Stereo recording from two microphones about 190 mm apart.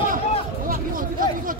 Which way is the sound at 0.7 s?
45° right (ahead or behind).